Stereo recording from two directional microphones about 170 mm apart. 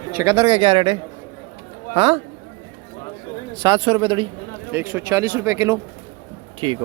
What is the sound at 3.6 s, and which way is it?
Speech, 30° right (ahead or behind).